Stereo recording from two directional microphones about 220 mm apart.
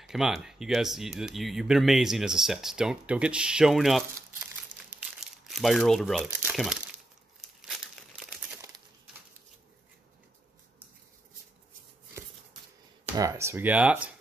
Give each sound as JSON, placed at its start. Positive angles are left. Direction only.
{"t": 0.0, "sound": "speech", "side_deg": 0}
{"t": 4.7, "sound": "crumpling", "side_deg": -90}
{"t": 5.4, "sound": "speech", "side_deg": 0}
{"t": 7.4, "sound": "crumpling", "side_deg": 0}
{"t": 13.1, "sound": "speech", "side_deg": -15}